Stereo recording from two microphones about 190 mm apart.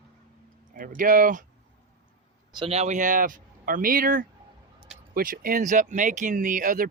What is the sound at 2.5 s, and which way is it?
Speech, 30° right (ahead or behind).